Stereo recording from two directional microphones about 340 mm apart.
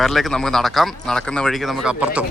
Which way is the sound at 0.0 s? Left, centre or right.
Centre.